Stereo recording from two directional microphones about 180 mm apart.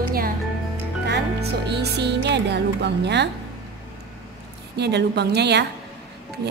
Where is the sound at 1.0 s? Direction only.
70° right (ahead or behind).